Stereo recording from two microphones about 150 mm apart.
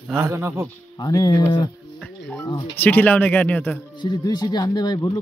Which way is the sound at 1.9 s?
Centre (ahead or behind).